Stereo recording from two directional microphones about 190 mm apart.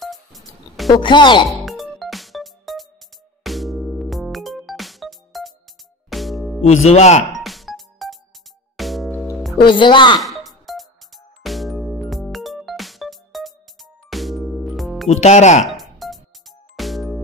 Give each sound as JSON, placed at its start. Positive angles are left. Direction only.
{"t": 0.0, "sound": "music", "side_deg": 0}
{"t": 0.9, "sound": "speech", "side_deg": 25}
{"t": 1.5, "sound": "music", "side_deg": 0}
{"t": 6.6, "sound": "speech", "side_deg": 35}
{"t": 7.3, "sound": "music", "side_deg": 0}
{"t": 9.6, "sound": "speech", "side_deg": 25}
{"t": 10.2, "sound": "music", "side_deg": 0}
{"t": 15.0, "sound": "speech", "side_deg": 40}
{"t": 15.6, "sound": "music", "side_deg": 0}